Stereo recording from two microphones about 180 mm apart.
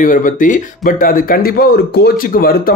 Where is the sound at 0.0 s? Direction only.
50° left (ahead or behind).